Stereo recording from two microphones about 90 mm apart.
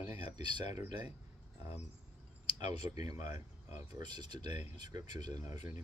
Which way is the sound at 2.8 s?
40° right (ahead or behind).